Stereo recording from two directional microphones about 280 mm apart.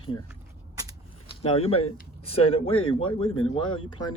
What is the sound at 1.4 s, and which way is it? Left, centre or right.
Speech, centre.